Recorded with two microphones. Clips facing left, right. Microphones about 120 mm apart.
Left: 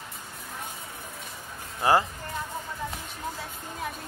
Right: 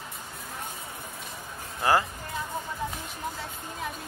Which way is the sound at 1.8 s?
25° left (ahead or behind).